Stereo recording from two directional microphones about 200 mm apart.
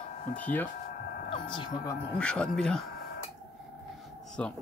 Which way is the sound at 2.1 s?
5° left (ahead or behind).